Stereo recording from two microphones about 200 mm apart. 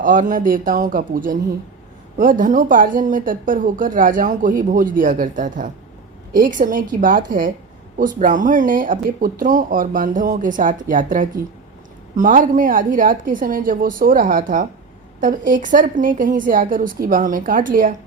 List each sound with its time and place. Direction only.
0.0 s speech: 40° right (ahead or behind)